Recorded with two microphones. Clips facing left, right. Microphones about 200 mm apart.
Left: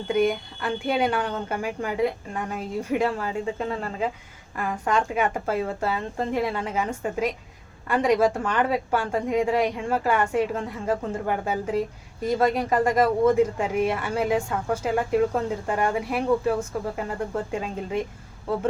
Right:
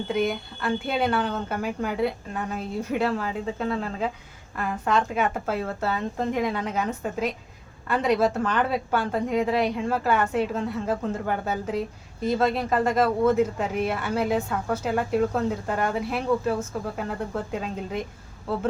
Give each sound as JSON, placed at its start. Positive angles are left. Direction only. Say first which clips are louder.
{"t": 0.6, "sound": "a woman's voice", "louder": "left 1 dB", "side_deg": 10}